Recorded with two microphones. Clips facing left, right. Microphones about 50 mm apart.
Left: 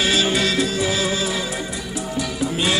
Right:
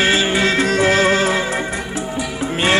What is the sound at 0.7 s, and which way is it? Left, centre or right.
Music, right.